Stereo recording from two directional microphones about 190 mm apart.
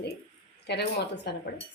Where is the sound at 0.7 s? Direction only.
60° left (ahead or behind).